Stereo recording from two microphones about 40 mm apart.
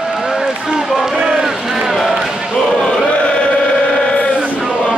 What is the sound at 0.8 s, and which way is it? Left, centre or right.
Run, centre.